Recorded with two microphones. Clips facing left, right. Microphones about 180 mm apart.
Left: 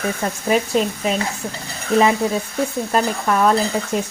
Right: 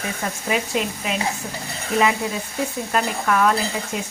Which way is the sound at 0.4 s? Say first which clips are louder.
Left 6 dB; 40° left (ahead or behind).